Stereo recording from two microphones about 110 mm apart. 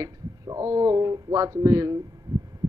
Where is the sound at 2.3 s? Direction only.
30° right (ahead or behind).